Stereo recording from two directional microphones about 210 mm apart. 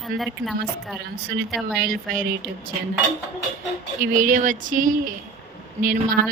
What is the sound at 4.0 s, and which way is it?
Speech, 40° right (ahead or behind).